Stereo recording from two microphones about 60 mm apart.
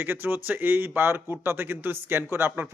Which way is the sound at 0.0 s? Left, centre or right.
Right.